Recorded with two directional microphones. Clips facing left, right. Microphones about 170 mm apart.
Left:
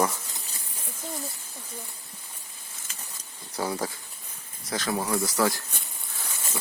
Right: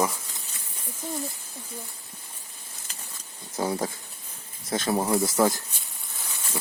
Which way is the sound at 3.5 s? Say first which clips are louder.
Right 2 dB; 25° right (ahead or behind).